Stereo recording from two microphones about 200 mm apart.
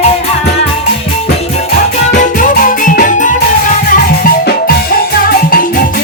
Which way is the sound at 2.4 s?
40° left (ahead or behind).